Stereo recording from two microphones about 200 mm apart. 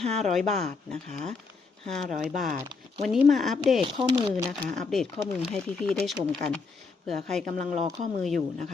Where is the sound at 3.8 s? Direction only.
25° right (ahead or behind).